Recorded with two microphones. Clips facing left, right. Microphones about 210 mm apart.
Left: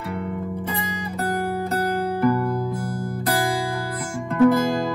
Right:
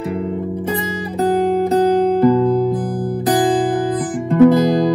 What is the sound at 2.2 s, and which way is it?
Music, 15° right (ahead or behind).